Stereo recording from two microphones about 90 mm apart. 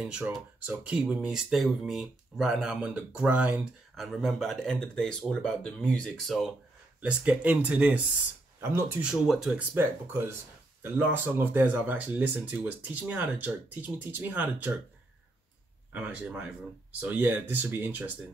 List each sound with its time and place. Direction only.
0.7 s speech: 15° right (ahead or behind)
3.9 s speech: centre (ahead or behind)
7.0 s speech: 15° right (ahead or behind)
8.5 s speech: 30° right (ahead or behind)
9.0 s speech: 5° right (ahead or behind)
9.8 s speech: 25° right (ahead or behind)
15.9 s speech: 15° right (ahead or behind)